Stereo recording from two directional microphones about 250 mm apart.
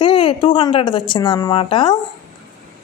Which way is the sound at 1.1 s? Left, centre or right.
Centre.